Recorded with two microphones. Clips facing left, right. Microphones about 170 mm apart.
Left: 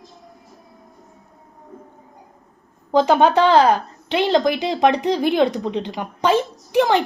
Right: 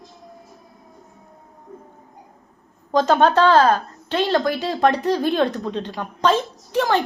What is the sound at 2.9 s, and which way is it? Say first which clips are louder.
A woman's voice: left 1 dB; 15° left (ahead or behind).